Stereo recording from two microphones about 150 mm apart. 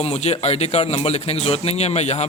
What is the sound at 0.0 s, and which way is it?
A man's voice, 45° left (ahead or behind).